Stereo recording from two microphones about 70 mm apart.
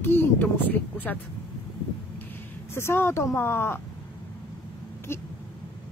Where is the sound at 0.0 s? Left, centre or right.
Left.